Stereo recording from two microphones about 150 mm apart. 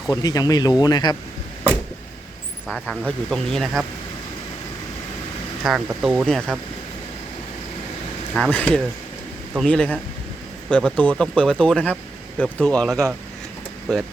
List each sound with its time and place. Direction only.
0.1 s speech: 25° left (ahead or behind)
2.6 s speech: centre (ahead or behind)
5.6 s speech: 5° right (ahead or behind)
8.4 s speech: 5° left (ahead or behind)